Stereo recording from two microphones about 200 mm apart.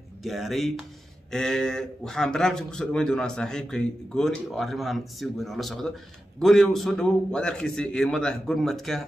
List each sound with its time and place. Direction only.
0.2 s speech: centre (ahead or behind)